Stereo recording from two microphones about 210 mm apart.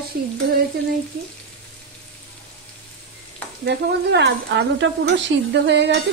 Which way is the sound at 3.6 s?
55° right (ahead or behind).